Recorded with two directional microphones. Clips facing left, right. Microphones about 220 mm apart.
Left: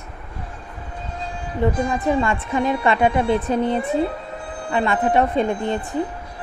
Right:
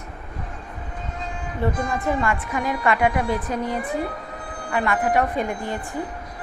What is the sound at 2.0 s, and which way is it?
A woman's voice, 25° left (ahead or behind).